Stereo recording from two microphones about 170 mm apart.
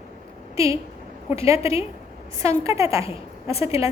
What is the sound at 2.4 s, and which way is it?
Speech, 15° right (ahead or behind).